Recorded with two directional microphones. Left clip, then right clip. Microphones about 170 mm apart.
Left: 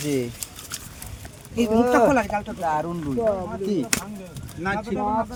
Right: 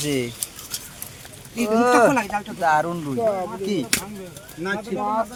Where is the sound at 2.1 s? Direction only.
25° left (ahead or behind).